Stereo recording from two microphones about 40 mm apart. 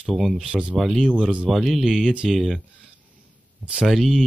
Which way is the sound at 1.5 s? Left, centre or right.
Centre.